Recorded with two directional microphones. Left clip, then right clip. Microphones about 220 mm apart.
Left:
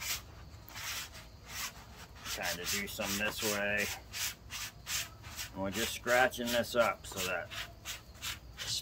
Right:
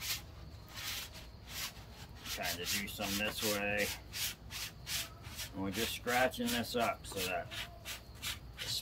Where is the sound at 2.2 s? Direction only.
15° left (ahead or behind).